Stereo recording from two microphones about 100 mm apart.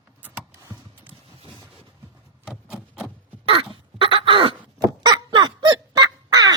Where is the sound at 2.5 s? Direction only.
5° right (ahead or behind).